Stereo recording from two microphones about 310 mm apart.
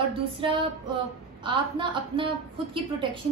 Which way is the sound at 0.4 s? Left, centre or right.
Centre.